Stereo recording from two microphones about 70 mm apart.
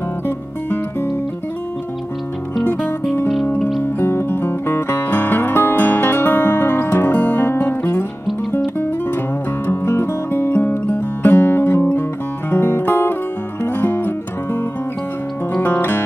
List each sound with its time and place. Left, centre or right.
3.8 s music: left
15.6 s music: left